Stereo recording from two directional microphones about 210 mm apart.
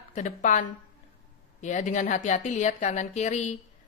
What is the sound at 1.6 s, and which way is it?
Speech, 35° left (ahead or behind).